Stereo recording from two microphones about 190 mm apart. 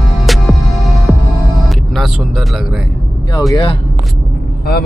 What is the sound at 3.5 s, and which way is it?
Speech, 25° left (ahead or behind).